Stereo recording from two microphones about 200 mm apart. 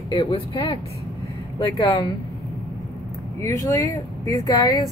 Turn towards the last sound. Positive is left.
turn(degrees=20)  # may be behind; listen again after turning